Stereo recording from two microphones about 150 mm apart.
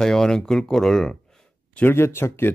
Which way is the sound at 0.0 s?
5° left (ahead or behind).